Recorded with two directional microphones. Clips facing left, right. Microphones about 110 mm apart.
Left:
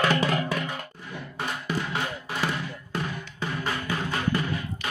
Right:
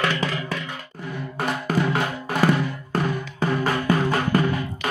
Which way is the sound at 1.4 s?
70° right (ahead or behind).